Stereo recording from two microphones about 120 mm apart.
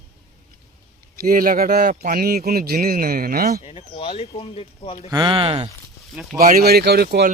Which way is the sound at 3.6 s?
55° left (ahead or behind).